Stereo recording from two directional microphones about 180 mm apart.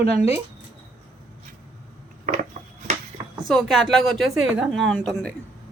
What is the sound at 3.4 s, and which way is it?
A woman's voice, centre (ahead or behind).